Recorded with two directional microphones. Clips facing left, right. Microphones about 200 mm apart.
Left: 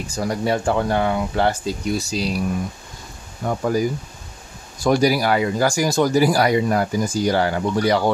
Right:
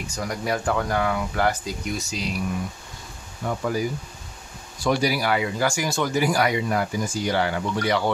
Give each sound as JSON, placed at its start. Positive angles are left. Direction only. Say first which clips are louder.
{"t": 0.0, "sound": "speech", "louder": "left 6 dB", "side_deg": 30}
{"t": 3.4, "sound": "speech", "louder": "left 5 dB", "side_deg": 40}